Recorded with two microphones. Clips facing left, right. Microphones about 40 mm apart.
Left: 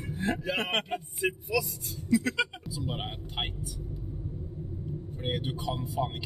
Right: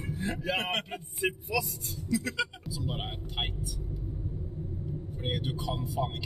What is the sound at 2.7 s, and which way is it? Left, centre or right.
Speech, centre.